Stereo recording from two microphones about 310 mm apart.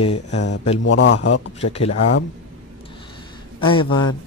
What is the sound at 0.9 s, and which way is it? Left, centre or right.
Speech, left.